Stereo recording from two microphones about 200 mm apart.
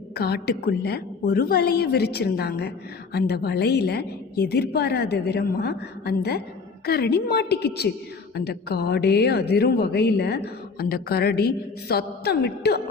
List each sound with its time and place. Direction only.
0.2 s a woman's voice: 55° left (ahead or behind)